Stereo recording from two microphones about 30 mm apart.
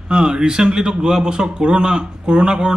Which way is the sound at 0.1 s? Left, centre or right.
Right.